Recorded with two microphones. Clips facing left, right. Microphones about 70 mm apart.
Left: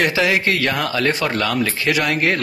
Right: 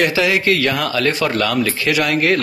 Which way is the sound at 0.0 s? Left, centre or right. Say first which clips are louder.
Right 1 dB; left.